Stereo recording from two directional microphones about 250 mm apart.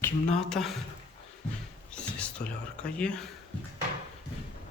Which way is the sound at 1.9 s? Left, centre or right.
Centre.